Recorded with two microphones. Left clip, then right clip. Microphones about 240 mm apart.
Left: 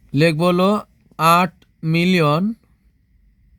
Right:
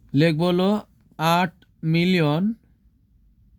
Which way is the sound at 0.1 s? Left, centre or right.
Left.